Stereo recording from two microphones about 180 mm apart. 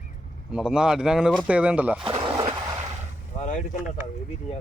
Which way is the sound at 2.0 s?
30° right (ahead or behind).